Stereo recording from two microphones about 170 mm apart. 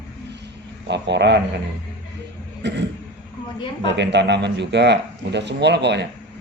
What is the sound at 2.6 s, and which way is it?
Speech, 90° right.